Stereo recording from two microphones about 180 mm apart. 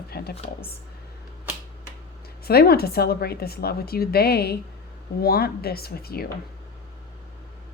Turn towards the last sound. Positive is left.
turn(degrees=60)  # may be behind; listen again after turning